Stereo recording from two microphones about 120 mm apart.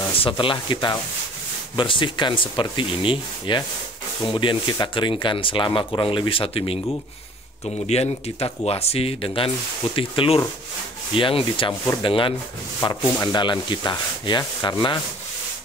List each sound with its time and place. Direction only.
0.2 s speech: 45° left (ahead or behind)
12.8 s sanding: 35° left (ahead or behind)